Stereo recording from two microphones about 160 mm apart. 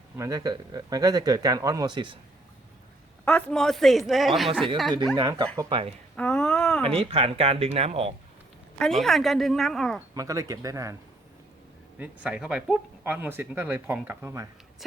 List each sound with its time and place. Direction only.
0.2 s speech: 20° right (ahead or behind)
3.2 s speech: 5° left (ahead or behind)
5.1 s speech: 25° right (ahead or behind)
6.1 s speech: 5° left (ahead or behind)
6.9 s speech: 35° right (ahead or behind)
8.8 s speech: centre (ahead or behind)
10.2 s speech: 20° right (ahead or behind)
11.9 s speech: 10° right (ahead or behind)